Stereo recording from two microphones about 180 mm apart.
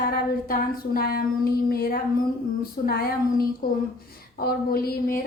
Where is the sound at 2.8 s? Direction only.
45° left (ahead or behind).